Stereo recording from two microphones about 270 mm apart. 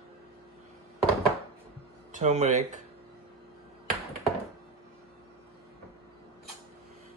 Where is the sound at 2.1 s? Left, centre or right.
Right.